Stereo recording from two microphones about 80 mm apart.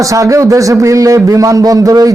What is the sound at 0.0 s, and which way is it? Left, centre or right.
Speech, right.